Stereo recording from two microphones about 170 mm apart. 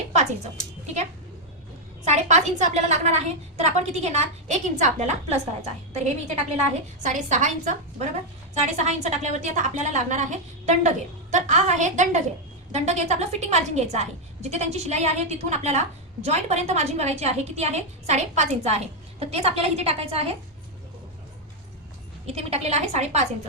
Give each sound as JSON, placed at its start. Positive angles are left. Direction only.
{"t": 2.0, "sound": "a woman's voice", "side_deg": -40}
{"t": 22.3, "sound": "a woman's voice", "side_deg": -35}